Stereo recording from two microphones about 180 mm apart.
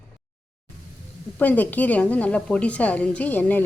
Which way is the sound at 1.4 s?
10° left (ahead or behind).